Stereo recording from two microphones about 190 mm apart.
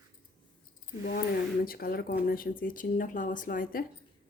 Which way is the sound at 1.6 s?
50° left (ahead or behind).